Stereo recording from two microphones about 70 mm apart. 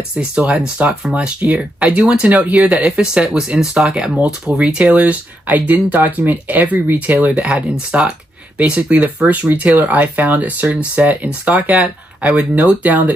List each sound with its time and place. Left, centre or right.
0.8 s speech: right